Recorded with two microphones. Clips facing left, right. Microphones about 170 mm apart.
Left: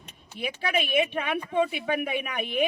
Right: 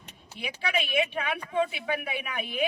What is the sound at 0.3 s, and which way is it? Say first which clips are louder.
Speech: left 3 dB; 50° left (ahead or behind).